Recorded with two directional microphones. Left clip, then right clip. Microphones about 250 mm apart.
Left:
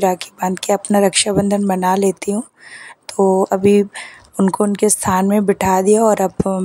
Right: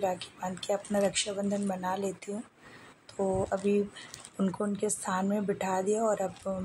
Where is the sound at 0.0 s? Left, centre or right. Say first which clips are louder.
Left 15 dB; left.